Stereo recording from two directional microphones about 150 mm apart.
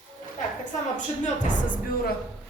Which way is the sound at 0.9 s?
55° left (ahead or behind).